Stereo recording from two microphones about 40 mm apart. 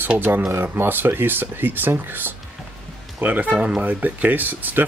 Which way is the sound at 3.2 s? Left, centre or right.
Right.